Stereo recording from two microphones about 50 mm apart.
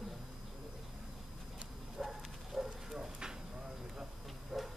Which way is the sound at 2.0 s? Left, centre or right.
Centre.